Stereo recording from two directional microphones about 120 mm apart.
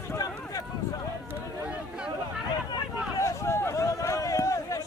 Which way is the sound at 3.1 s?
25° left (ahead or behind).